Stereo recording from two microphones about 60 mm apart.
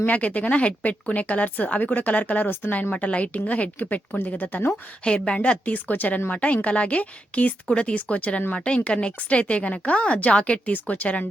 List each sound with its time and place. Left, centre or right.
0.0 s speech: left
5.0 s speech: centre